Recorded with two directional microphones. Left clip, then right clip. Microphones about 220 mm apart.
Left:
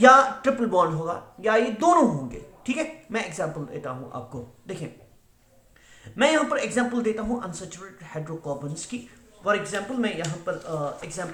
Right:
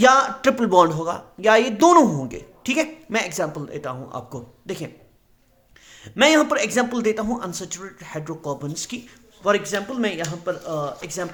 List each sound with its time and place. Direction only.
0.0 s speech: 50° right (ahead or behind)
6.1 s speech: 50° right (ahead or behind)